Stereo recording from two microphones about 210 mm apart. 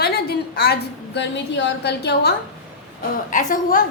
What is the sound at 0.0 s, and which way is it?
A woman's voice, 50° left (ahead or behind).